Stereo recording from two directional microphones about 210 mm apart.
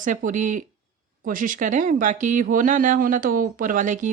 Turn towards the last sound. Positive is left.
turn(degrees=-40)  # may be behind; listen again after turning